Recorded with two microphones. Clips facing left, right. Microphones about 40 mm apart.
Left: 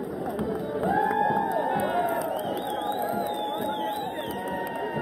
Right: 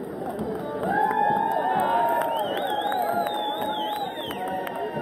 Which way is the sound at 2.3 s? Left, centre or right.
Right.